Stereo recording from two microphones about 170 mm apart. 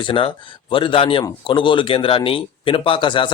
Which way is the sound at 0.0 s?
30° left (ahead or behind).